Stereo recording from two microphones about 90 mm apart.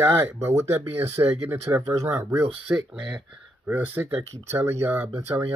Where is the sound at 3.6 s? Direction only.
25° right (ahead or behind).